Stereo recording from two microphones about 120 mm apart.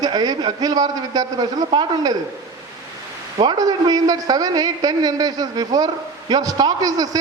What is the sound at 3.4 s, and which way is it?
A man's voice, 35° right (ahead or behind).